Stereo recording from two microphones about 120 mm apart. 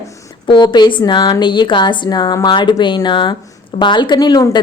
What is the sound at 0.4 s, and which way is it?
A woman's voice, 40° left (ahead or behind).